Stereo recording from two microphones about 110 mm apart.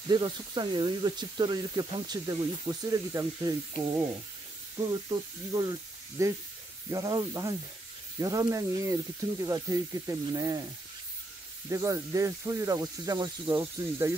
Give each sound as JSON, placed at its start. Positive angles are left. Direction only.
{"t": 0.1, "sound": "speech", "side_deg": -40}
{"t": 3.3, "sound": "hiss", "side_deg": -45}
{"t": 4.7, "sound": "speech", "side_deg": -35}
{"t": 11.7, "sound": "speech", "side_deg": -30}